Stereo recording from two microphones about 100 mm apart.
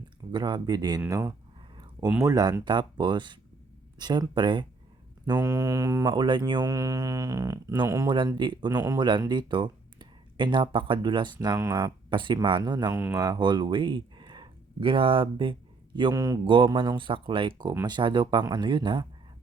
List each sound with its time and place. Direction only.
0.3 s speech: 50° right (ahead or behind)
1.0 s mantra: 30° right (ahead or behind)
2.2 s speech: 40° right (ahead or behind)
5.2 s mantra: 40° right (ahead or behind)
6.1 s speech: 50° right (ahead or behind)
6.7 s mantra: 35° right (ahead or behind)
8.0 s speech: 55° right (ahead or behind)
8.7 s a man's voice: 20° right (ahead or behind)
9.0 s speech: 50° right (ahead or behind)
12.9 s a man's voice: 20° right (ahead or behind)
13.1 s speech: 45° right (ahead or behind); by 15.5 s 60° right (ahead or behind)
16.1 s mantra: 35° right (ahead or behind)
16.4 s speech: 55° right (ahead or behind)